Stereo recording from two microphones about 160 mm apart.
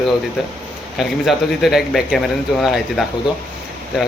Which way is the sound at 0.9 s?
Centre (ahead or behind).